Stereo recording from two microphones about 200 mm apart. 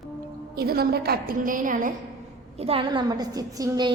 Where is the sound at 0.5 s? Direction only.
50° right (ahead or behind).